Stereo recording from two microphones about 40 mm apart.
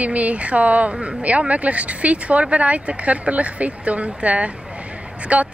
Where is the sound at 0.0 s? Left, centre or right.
Right.